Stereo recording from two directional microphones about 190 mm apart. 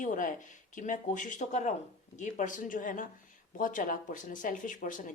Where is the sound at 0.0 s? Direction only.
45° left (ahead or behind).